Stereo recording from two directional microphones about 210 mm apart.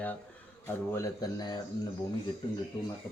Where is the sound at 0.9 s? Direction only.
15° left (ahead or behind).